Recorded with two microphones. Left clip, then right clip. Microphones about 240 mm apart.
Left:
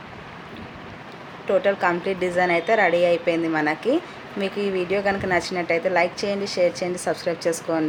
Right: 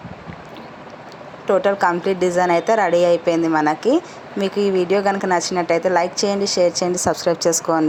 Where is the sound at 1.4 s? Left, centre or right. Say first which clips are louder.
Right 4 dB; centre.